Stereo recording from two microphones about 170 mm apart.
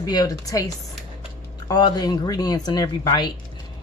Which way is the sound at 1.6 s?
25° left (ahead or behind).